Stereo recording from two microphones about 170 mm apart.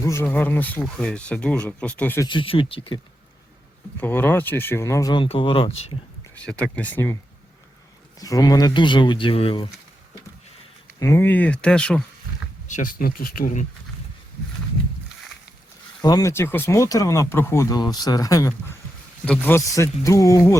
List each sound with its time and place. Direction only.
0.0 s speech: 15° left (ahead or behind)
2.2 s speech: 30° left (ahead or behind)
4.0 s speech: 10° left (ahead or behind); by 5.9 s 35° left (ahead or behind)
6.3 s speech: 5° left (ahead or behind)
8.2 s speech: 20° left (ahead or behind)
11.0 s speech: 15° left (ahead or behind)
12.6 s speech: 50° left (ahead or behind)
16.0 s speech: 20° left (ahead or behind)
19.2 s speech: 10° left (ahead or behind)